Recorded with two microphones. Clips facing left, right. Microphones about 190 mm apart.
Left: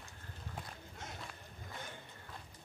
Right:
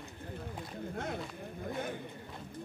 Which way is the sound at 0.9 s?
60° right (ahead or behind).